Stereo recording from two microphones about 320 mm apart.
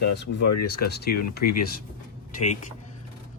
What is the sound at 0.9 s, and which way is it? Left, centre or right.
Speech, left.